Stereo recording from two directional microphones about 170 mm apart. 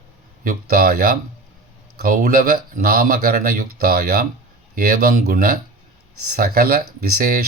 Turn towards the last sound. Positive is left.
turn(degrees=-60)  # may be behind; listen again after turning